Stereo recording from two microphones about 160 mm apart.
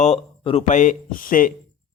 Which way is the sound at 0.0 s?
40° left (ahead or behind).